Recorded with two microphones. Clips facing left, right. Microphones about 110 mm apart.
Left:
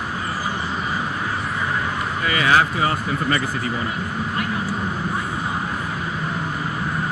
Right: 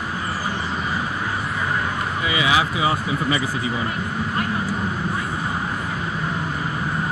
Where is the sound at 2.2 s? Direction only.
50° left (ahead or behind).